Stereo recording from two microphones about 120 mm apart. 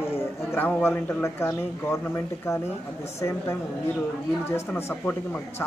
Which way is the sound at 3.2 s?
25° left (ahead or behind).